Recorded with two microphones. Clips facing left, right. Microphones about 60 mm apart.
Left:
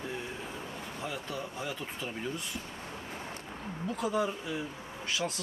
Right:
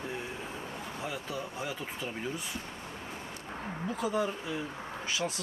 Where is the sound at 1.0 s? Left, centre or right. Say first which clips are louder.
Even; centre.